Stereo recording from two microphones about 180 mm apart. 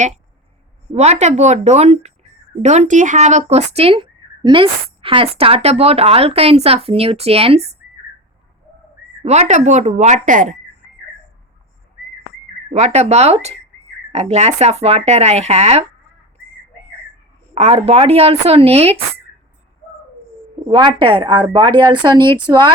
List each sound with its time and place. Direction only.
0.9 s speech: 40° right (ahead or behind)
9.2 s speech: 35° right (ahead or behind)
12.7 s speech: 40° right (ahead or behind)
17.5 s speech: 35° right (ahead or behind)
20.7 s a woman's voice: 25° right (ahead or behind)